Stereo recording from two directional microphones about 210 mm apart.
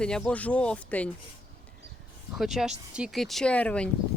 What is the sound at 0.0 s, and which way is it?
Speech, 5° left (ahead or behind).